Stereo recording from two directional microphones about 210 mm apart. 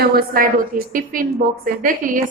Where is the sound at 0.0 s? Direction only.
45° right (ahead or behind).